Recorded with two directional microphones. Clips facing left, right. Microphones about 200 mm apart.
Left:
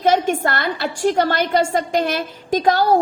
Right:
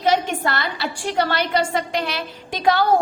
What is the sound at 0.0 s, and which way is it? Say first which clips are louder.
A woman's voice: left 3 dB; 50° left (ahead or behind).